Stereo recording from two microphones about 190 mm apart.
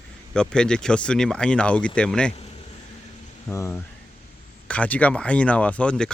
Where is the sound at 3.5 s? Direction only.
10° left (ahead or behind).